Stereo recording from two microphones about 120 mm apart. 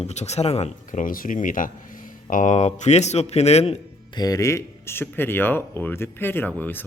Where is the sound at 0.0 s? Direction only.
70° left (ahead or behind).